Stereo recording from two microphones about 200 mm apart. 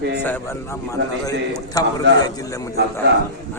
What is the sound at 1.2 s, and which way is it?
Speech, 20° left (ahead or behind).